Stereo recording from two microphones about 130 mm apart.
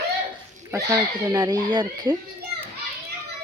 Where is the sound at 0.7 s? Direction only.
25° right (ahead or behind).